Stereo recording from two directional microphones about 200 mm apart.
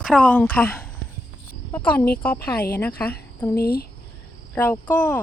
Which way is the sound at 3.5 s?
50° left (ahead or behind).